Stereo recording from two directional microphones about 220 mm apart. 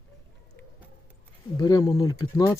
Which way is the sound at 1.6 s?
15° left (ahead or behind).